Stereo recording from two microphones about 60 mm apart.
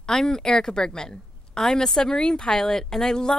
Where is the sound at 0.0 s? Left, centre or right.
Centre.